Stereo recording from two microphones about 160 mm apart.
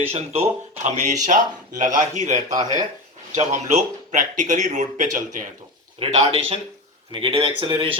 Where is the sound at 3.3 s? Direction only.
50° right (ahead or behind).